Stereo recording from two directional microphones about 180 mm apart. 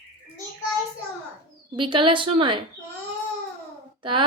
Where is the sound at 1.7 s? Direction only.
30° right (ahead or behind).